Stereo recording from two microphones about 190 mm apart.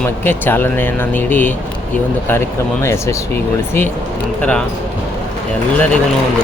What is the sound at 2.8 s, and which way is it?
Speech, 15° left (ahead or behind).